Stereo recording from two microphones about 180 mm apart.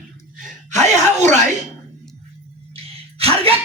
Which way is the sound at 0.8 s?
40° right (ahead or behind).